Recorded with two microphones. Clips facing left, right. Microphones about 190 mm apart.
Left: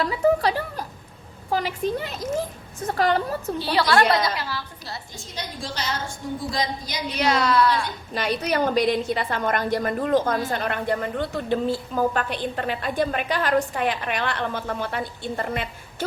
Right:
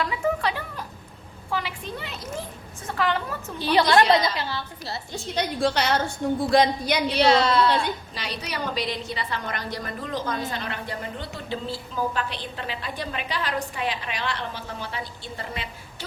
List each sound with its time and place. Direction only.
0.0 s a sound: 35° left (ahead or behind)
1.5 s a woman's voice: 40° left (ahead or behind)
3.6 s a woman's voice: 20° right (ahead or behind)
5.1 s a woman's voice: 65° right (ahead or behind)
7.1 s a woman's voice: 30° right (ahead or behind)
8.1 s a woman's voice: 50° left (ahead or behind)